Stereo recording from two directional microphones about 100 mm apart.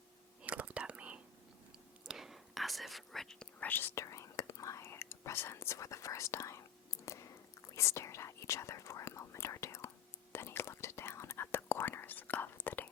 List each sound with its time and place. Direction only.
0.4 s whispering: 15° right (ahead or behind); by 6.6 s 30° left (ahead or behind)
7.0 s chewing: 30° left (ahead or behind)
7.8 s whispering: 30° left (ahead or behind)